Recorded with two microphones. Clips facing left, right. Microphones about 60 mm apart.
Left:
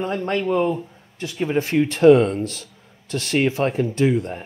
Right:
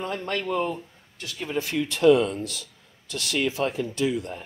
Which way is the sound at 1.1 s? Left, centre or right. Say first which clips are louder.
Left 8 dB; left.